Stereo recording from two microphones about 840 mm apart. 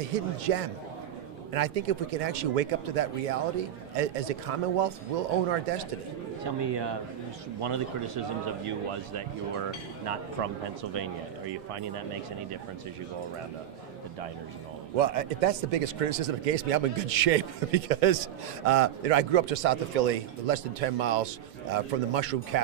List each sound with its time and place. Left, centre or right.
0.1 s a man's voice: right
1.5 s a man's voice: right
6.4 s a man's voice: right
15.0 s a man's voice: right